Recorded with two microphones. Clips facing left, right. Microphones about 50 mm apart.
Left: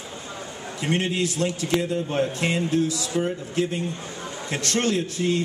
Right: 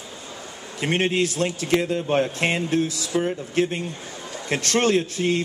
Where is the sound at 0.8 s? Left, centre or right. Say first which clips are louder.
Right 3 dB; right.